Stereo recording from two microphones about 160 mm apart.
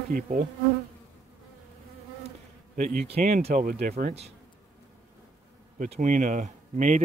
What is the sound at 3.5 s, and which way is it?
Speech, 65° right (ahead or behind).